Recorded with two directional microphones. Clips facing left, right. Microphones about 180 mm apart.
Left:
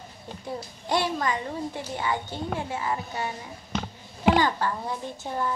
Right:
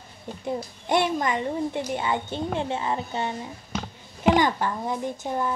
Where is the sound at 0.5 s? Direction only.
20° right (ahead or behind).